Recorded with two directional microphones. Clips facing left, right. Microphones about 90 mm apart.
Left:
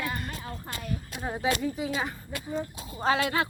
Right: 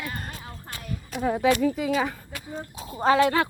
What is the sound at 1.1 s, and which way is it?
Speech, 80° right.